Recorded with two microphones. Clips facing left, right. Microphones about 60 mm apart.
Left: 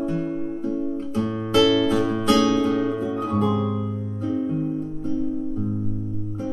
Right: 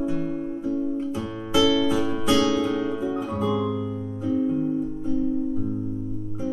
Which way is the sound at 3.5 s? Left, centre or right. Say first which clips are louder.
Even; left.